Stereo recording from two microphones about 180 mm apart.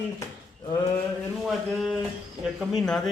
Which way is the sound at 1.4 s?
Centre (ahead or behind).